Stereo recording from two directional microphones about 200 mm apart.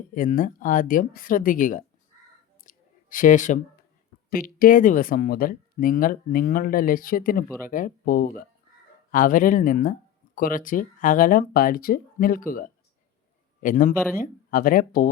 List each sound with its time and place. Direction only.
0.1 s speech: 40° left (ahead or behind)
2.6 s a sound: 40° left (ahead or behind)
4.3 s a man's voice: 45° left (ahead or behind)